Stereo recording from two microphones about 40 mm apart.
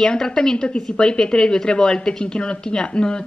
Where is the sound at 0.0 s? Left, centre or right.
Centre.